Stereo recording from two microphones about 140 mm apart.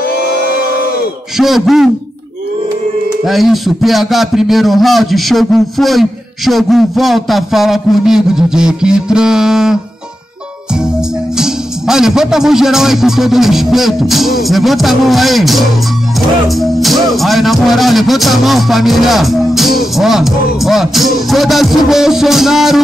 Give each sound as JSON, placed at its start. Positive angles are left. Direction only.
{"t": 0.1, "sound": "a sound", "side_deg": 90}
{"t": 1.4, "sound": "a man's voice", "side_deg": 0}
{"t": 3.3, "sound": "a man's voice", "side_deg": 0}
{"t": 11.3, "sound": "a man's voice", "side_deg": -5}